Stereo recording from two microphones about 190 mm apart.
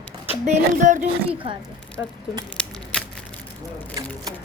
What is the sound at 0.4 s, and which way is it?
Speech, 40° right (ahead or behind).